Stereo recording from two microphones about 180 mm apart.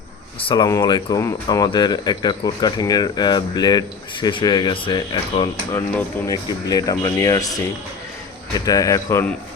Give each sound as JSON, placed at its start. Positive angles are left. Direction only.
{"t": 0.3, "sound": "speech", "side_deg": 25}